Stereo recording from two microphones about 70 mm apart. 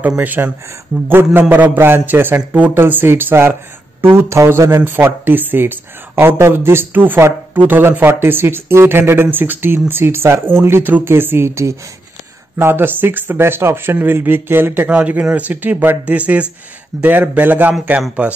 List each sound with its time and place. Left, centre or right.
0.2 s speech: right